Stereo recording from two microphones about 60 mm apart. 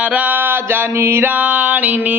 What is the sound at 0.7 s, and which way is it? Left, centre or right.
Music, right.